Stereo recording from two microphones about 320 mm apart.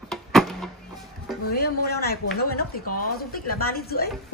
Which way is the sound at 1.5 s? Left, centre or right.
Left.